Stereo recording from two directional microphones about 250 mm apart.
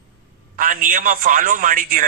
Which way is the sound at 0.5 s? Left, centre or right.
Right.